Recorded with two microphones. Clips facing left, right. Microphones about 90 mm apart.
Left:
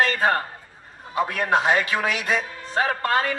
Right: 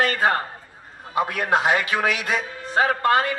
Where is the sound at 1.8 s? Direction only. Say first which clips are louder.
Right 1 dB; 25° right (ahead or behind).